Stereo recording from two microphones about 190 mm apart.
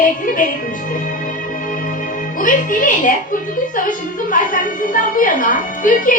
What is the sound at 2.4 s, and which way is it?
Speech, 45° left (ahead or behind).